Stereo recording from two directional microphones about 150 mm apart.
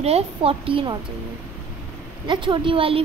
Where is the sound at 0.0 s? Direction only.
40° right (ahead or behind).